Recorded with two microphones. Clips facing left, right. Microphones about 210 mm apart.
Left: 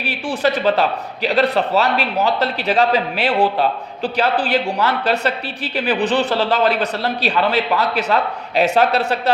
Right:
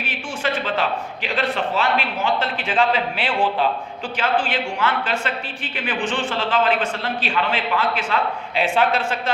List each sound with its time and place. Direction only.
0.0 s a man's voice: 35° left (ahead or behind)